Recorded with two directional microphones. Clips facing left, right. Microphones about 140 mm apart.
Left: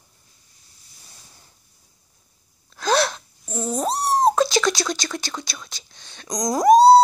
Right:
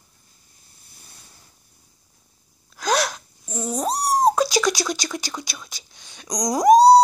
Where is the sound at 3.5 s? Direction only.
5° left (ahead or behind).